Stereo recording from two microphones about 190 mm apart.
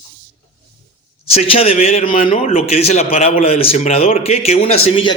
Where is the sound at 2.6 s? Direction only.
35° left (ahead or behind).